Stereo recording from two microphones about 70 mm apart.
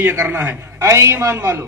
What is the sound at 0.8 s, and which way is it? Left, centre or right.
Speech, right.